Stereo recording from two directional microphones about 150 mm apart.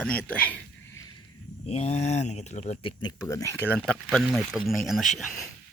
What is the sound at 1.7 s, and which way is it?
Speech, 45° left (ahead or behind).